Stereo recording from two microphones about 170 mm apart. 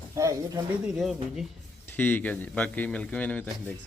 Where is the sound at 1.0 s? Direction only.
Centre (ahead or behind).